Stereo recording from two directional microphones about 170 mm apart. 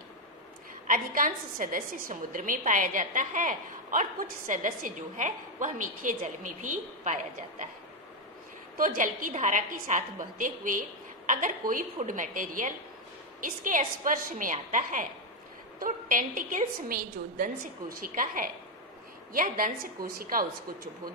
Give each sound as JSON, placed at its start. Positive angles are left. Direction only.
{"t": 0.8, "sound": "a woman's voice", "side_deg": -55}
{"t": 8.7, "sound": "a woman's voice", "side_deg": -50}